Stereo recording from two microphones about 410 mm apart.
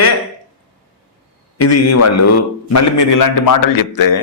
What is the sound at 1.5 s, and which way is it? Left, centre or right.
A man's voice, left.